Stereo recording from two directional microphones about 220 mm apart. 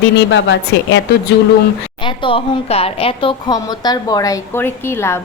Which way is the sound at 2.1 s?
25° left (ahead or behind).